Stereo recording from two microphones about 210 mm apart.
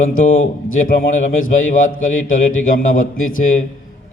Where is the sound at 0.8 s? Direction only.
35° left (ahead or behind).